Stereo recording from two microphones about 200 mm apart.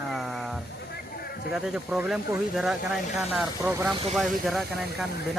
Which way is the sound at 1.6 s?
5° right (ahead or behind).